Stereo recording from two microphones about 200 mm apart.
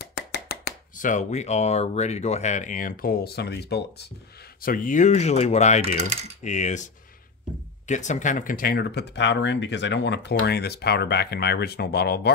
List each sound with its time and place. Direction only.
0.0 s speech: 55° left (ahead or behind)